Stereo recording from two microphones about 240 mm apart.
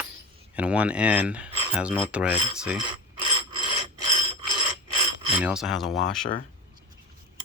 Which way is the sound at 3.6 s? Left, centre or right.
Right.